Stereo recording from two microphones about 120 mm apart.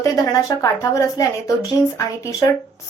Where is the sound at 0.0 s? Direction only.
30° left (ahead or behind).